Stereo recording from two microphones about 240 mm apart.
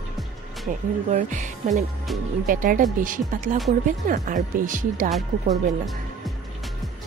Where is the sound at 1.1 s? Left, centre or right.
Right.